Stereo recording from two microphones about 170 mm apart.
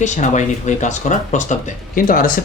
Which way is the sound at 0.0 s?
45° left (ahead or behind).